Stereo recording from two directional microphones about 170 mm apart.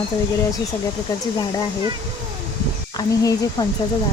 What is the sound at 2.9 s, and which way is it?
Speech, 25° left (ahead or behind).